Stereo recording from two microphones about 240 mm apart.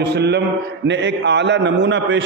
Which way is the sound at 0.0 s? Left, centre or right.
Right.